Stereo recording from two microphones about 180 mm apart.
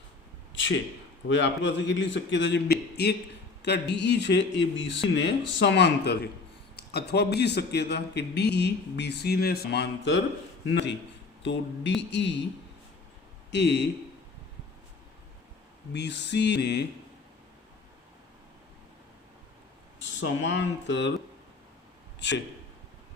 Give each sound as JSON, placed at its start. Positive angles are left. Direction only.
{"t": 0.5, "sound": "a sound", "side_deg": 90}
{"t": 1.3, "sound": "a man's voice", "side_deg": 85}
{"t": 11.9, "sound": "a man's voice", "side_deg": 75}
{"t": 13.5, "sound": "a man's voice", "side_deg": 70}
{"t": 15.9, "sound": "a man's voice", "side_deg": 70}
{"t": 20.1, "sound": "a man's voice", "side_deg": 90}